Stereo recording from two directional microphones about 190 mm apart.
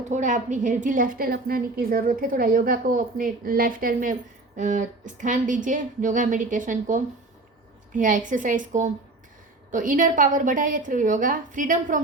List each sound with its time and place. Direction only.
0.1 s a woman's voice: 40° right (ahead or behind)